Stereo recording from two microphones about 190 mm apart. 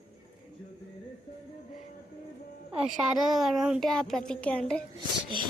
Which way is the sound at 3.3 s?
Centre (ahead or behind).